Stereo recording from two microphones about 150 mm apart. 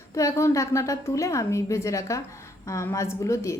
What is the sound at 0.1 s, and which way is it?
A woman's voice, 20° left (ahead or behind).